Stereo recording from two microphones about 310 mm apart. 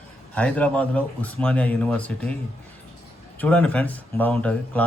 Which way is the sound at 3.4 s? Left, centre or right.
Centre.